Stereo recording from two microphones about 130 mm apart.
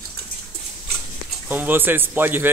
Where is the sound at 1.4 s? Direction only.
15° right (ahead or behind).